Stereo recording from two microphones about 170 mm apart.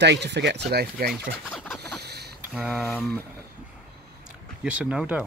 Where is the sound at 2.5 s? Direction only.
Centre (ahead or behind).